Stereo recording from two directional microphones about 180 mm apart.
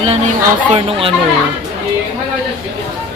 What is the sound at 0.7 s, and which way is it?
Speech, 30° right (ahead or behind).